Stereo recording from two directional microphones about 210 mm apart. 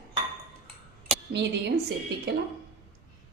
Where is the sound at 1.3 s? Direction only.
55° right (ahead or behind).